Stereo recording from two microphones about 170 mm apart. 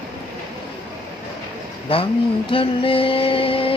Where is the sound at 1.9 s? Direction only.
30° left (ahead or behind).